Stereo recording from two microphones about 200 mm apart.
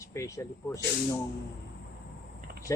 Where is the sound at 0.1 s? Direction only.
15° left (ahead or behind).